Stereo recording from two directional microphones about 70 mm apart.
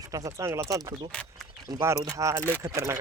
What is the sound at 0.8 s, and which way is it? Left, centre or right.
Speech, right.